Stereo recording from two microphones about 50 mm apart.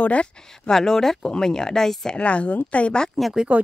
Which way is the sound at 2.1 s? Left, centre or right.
Left.